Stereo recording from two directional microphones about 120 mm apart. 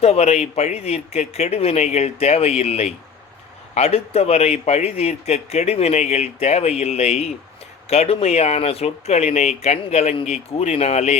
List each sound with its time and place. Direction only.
0.0 s speech: 60° left (ahead or behind)